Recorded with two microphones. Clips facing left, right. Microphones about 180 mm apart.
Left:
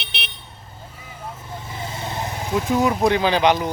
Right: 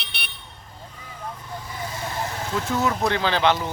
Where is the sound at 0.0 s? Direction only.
20° left (ahead or behind).